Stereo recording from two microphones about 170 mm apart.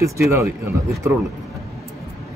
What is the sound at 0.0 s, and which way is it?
Speech, 15° right (ahead or behind).